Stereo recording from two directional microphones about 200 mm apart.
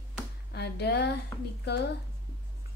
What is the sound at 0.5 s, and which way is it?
Speech, 55° left (ahead or behind).